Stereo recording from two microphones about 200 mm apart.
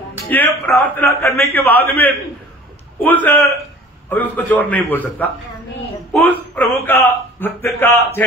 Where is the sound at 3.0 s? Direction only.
10° left (ahead or behind).